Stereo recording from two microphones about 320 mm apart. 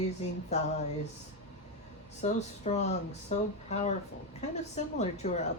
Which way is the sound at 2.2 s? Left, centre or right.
Left.